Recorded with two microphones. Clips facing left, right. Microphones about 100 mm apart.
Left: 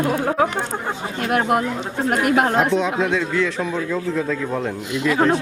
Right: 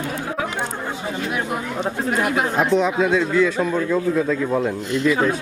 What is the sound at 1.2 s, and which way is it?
Speech, 60° left (ahead or behind).